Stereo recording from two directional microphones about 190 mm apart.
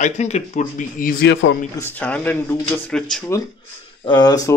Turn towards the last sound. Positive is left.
turn(degrees=20)  # may be behind; listen again after turning